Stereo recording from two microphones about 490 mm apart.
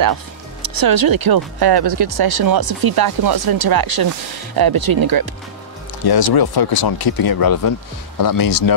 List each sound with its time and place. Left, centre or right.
0.0 s speech: right
6.0 s speech: left